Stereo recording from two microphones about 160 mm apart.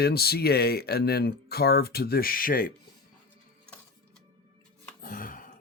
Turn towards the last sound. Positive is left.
turn(degrees=60)  # may be behind; listen again after turning